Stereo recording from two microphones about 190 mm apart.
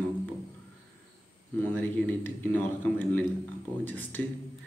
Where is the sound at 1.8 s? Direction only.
10° left (ahead or behind).